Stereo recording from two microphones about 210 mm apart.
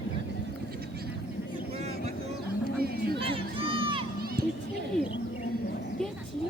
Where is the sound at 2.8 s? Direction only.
45° right (ahead or behind).